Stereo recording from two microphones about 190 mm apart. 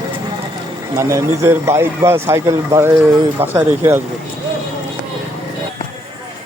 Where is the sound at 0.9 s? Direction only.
15° right (ahead or behind).